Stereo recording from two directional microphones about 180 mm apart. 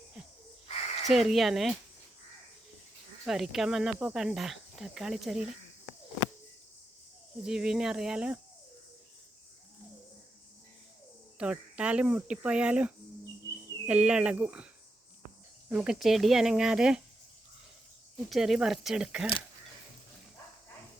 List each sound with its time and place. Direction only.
0.7 s a sound: 35° left (ahead or behind)
1.1 s speech: centre (ahead or behind)
3.2 s speech: centre (ahead or behind)
7.4 s speech: 5° right (ahead or behind)
11.3 s speech: 5° right (ahead or behind)
15.7 s speech: 5° right (ahead or behind)
18.3 s speech: centre (ahead or behind)